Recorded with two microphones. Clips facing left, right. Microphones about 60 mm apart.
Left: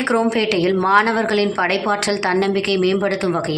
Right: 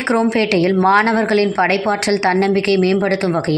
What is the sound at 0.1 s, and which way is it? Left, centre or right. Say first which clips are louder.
A woman's voice: right 3 dB; right.